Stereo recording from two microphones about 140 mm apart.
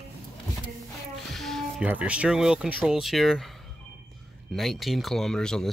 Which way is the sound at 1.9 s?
10° right (ahead or behind).